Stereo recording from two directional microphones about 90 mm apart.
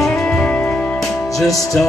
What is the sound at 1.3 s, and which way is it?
Music, 40° left (ahead or behind).